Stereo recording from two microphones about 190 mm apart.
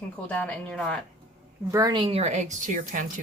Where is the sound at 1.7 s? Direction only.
20° right (ahead or behind); by 3.0 s 45° right (ahead or behind).